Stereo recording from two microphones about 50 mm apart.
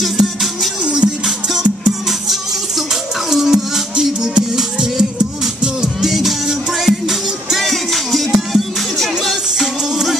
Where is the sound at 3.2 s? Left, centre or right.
Centre.